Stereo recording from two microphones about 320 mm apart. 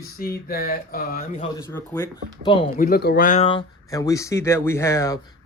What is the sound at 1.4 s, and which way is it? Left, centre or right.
Speech, centre.